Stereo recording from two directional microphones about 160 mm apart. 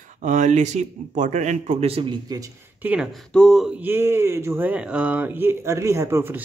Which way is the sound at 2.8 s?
10° right (ahead or behind).